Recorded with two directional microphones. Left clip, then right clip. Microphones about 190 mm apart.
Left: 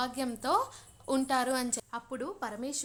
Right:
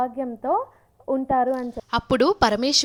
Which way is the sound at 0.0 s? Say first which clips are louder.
Right 8 dB; 15° right (ahead or behind).